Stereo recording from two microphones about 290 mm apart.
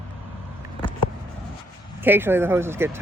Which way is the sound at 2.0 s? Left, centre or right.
Centre.